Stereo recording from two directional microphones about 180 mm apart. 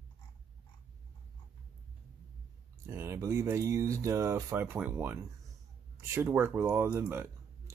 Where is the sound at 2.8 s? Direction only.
15° right (ahead or behind).